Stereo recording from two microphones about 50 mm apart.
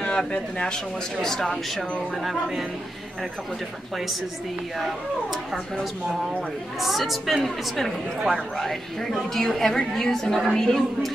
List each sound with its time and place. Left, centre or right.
0.0 s a woman's voice: centre
6.8 s a woman's voice: centre